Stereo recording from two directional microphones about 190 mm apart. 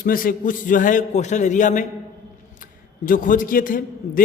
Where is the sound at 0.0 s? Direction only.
45° left (ahead or behind).